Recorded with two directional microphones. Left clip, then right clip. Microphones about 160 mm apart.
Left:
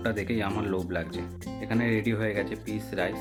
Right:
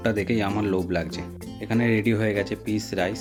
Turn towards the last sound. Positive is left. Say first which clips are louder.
# right 5 dB
turn(degrees=-40)  # may be behind; listen again after turning